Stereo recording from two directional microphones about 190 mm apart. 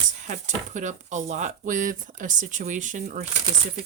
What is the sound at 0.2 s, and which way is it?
Speech, 40° right (ahead or behind).